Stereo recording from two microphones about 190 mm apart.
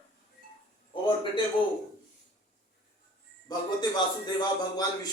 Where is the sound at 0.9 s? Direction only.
25° left (ahead or behind).